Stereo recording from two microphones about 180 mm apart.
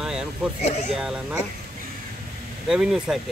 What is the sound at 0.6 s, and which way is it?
Speech, 35° left (ahead or behind).